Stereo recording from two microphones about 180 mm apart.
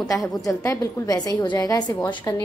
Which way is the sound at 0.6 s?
15° left (ahead or behind).